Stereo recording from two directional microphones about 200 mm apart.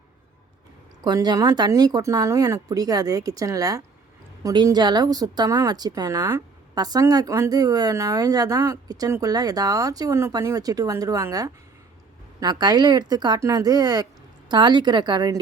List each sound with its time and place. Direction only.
1.0 s speech: 20° right (ahead or behind)